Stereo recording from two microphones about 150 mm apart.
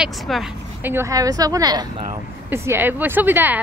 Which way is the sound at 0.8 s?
15° right (ahead or behind).